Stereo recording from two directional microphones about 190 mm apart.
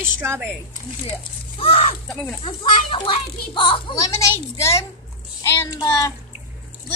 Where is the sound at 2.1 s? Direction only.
Centre (ahead or behind).